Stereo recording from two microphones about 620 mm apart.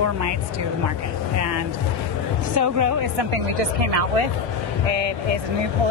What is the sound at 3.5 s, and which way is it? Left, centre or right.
Speech, right.